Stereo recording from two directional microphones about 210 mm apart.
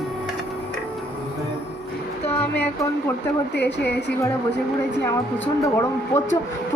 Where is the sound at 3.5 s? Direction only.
55° left (ahead or behind).